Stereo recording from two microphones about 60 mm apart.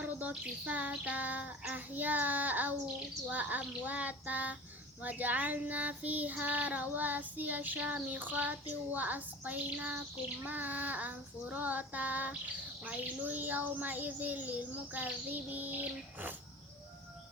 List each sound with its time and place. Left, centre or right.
0.0 s child singing: right